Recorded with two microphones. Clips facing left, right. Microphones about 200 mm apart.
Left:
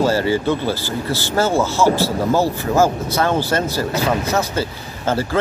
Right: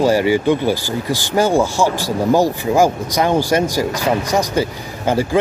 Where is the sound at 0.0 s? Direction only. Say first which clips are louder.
Right 3 dB; 15° right (ahead or behind).